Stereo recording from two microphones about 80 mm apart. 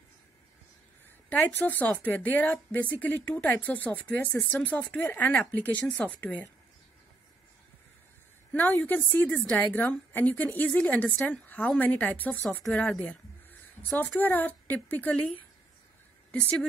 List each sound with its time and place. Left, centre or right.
1.3 s speech: left
8.5 s a woman's voice: left
12.7 s a woman's voice: centre